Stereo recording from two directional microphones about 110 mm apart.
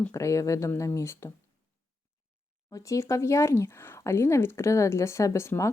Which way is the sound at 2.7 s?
30° left (ahead or behind).